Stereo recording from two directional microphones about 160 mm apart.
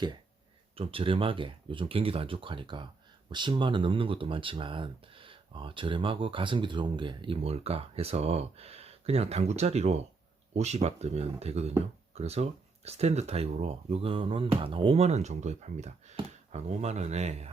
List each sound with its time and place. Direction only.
0.8 s speech: 35° right (ahead or behind)